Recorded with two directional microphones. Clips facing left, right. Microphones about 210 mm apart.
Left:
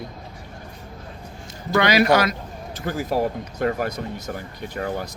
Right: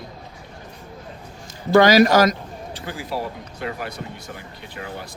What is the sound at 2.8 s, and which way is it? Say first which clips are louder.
Speech: left 6 dB; 45° left (ahead or behind).